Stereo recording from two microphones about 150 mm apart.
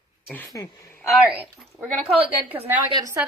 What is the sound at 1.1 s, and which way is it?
Speech, 10° right (ahead or behind).